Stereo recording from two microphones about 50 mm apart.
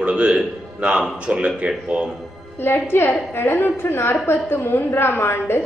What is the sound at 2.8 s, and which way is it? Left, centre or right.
A woman's voice, left.